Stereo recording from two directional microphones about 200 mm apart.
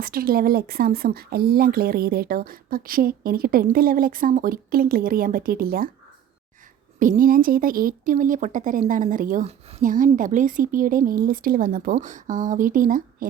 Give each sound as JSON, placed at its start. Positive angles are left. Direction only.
{"t": 0.0, "sound": "speech", "side_deg": -45}
{"t": 7.0, "sound": "speech", "side_deg": -40}